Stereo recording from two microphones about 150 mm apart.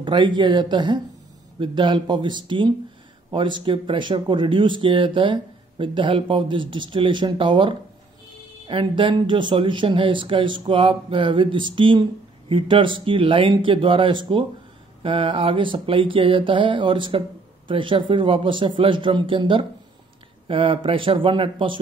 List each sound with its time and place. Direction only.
0.0 s speech: 30° right (ahead or behind)